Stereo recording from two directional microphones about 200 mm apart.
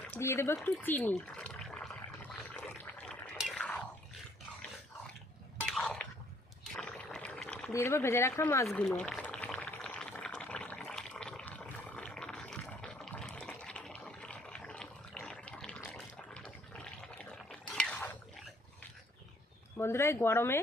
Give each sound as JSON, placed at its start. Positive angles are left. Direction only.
{"t": 0.1, "sound": "speech", "side_deg": 10}
{"t": 2.4, "sound": "a sound", "side_deg": 10}
{"t": 5.6, "sound": "a sound", "side_deg": 0}
{"t": 6.7, "sound": "pour", "side_deg": 5}
{"t": 8.6, "sound": "boiling", "side_deg": 5}
{"t": 15.8, "sound": "water", "side_deg": 5}
{"t": 19.7, "sound": "speech", "side_deg": 10}